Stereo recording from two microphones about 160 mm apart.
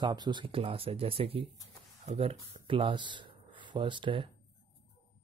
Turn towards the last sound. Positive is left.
turn(degrees=-30)  # may be behind; listen again after turning